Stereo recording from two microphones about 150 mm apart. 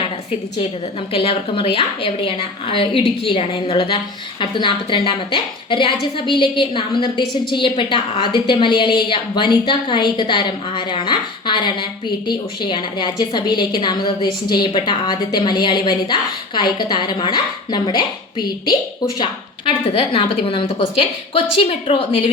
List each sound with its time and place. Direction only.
1.1 s a woman's voice: 40° left (ahead or behind)